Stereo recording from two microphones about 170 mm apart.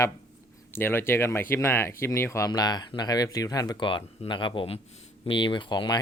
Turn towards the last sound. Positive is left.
turn(degrees=25)  # may be behind; listen again after turning